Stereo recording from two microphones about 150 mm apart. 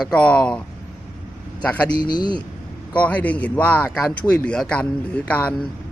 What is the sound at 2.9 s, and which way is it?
Speech, 10° left (ahead or behind).